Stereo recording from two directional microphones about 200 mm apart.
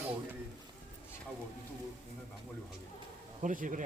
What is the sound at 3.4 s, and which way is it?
Speech, 40° right (ahead or behind).